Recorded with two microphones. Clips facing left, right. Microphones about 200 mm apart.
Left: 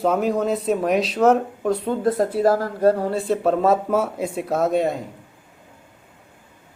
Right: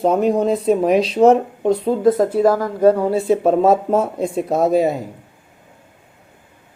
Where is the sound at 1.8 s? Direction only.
35° right (ahead or behind).